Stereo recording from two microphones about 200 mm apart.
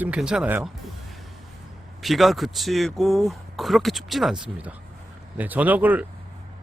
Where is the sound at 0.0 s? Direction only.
5° right (ahead or behind).